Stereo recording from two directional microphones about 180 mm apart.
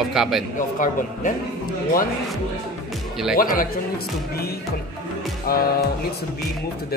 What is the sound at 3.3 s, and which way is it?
Speech, 50° left (ahead or behind).